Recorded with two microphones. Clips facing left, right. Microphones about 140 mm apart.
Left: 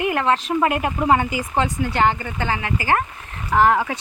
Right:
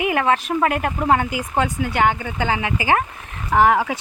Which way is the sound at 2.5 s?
15° right (ahead or behind).